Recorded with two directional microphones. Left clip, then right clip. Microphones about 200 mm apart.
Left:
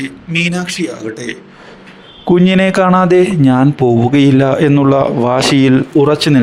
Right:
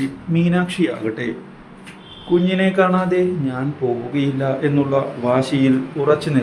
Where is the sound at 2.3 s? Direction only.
55° left (ahead or behind).